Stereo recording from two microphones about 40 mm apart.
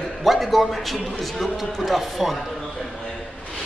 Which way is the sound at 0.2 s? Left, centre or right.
Centre.